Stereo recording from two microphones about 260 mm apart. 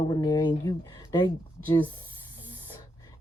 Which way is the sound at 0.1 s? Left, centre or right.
Centre.